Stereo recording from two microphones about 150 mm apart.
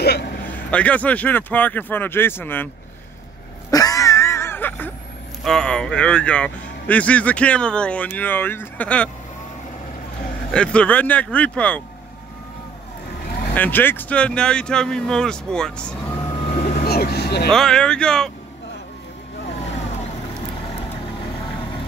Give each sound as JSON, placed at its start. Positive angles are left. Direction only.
{"t": 0.0, "sound": "vehicle", "side_deg": 90}
{"t": 0.5, "sound": "speech", "side_deg": 10}
{"t": 3.7, "sound": "a sound", "side_deg": 25}
{"t": 5.4, "sound": "speech", "side_deg": 5}
{"t": 10.5, "sound": "speech", "side_deg": 5}
{"t": 13.6, "sound": "speech", "side_deg": 10}
{"t": 16.8, "sound": "vehicle", "side_deg": 90}
{"t": 17.5, "sound": "speech", "side_deg": 5}